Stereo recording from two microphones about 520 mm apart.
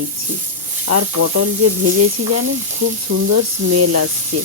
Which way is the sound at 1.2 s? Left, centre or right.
Right.